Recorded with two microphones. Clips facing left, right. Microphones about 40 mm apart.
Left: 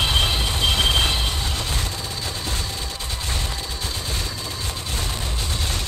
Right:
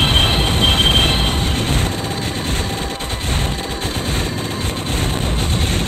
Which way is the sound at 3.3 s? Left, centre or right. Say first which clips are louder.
Right 7 dB; right.